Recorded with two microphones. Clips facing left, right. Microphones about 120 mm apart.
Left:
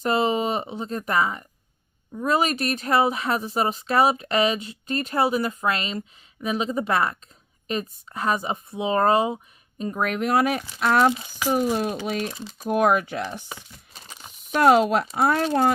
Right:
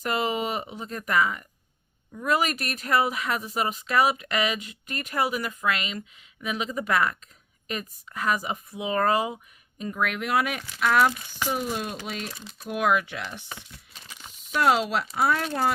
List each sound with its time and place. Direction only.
0.0 s speech: 30° left (ahead or behind)
13.9 s a sound: 35° left (ahead or behind)
14.5 s speech: 45° left (ahead or behind)
15.0 s speech: 30° left (ahead or behind)